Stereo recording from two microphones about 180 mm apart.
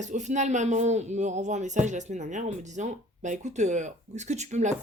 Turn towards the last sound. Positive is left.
turn(degrees=-40)  # may be behind; listen again after turning